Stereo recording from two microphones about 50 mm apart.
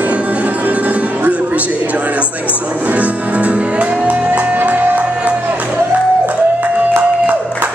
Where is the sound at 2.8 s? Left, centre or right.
Right.